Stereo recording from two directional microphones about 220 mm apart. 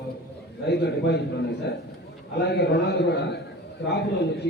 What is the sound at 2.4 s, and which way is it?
A man's voice, 45° left (ahead or behind).